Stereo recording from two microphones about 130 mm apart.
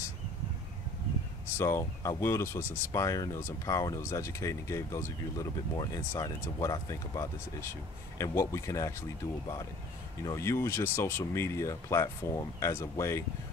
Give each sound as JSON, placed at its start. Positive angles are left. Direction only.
{"t": 1.6, "sound": "speech", "side_deg": 20}
{"t": 10.2, "sound": "speech", "side_deg": 20}